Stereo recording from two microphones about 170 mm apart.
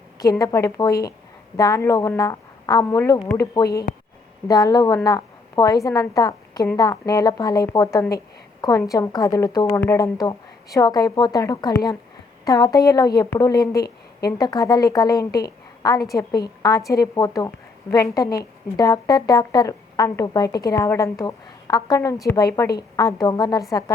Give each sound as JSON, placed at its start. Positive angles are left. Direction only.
{"t": 0.2, "sound": "a woman's voice", "side_deg": 20}